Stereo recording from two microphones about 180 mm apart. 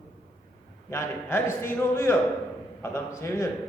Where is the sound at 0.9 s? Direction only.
15° left (ahead or behind).